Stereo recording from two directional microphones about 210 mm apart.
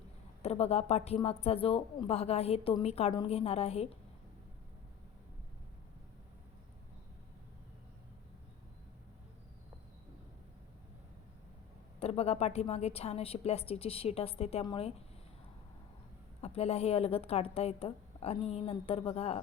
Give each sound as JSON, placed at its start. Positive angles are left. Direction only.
{"t": 0.4, "sound": "speech", "side_deg": 30}
{"t": 11.9, "sound": "speech", "side_deg": 30}
{"t": 16.4, "sound": "speech", "side_deg": 30}